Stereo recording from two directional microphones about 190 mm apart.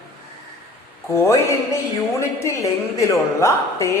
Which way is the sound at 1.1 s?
15° left (ahead or behind).